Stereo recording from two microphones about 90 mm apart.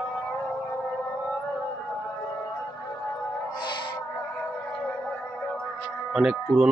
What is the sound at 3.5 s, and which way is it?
Music, 55° left (ahead or behind).